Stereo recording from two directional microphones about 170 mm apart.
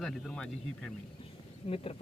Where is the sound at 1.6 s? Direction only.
35° left (ahead or behind).